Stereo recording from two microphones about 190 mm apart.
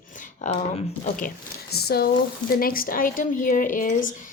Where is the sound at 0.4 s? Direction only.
40° left (ahead or behind).